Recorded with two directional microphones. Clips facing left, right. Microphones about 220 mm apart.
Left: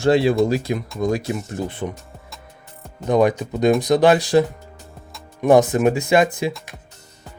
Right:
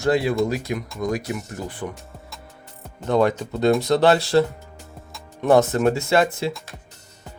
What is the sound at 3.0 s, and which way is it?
Speech, 15° left (ahead or behind).